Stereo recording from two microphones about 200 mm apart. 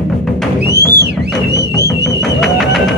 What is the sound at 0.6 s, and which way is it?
Music, 55° right (ahead or behind).